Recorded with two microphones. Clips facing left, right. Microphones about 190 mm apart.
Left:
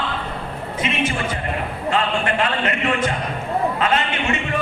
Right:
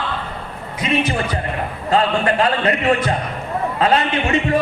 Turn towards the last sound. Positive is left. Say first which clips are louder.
# right 4 dB
turn(degrees=-35)  # may be behind; listen again after turning